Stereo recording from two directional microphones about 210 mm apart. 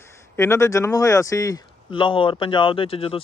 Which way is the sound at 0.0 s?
10° left (ahead or behind).